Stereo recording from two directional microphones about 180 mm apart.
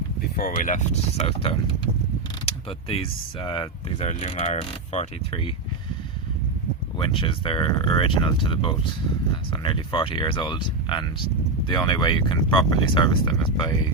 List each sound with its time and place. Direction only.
0.3 s speech: 50° left (ahead or behind)
7.0 s speech: 30° left (ahead or behind)